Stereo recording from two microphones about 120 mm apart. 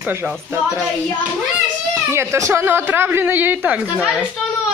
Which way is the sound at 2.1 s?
20° right (ahead or behind).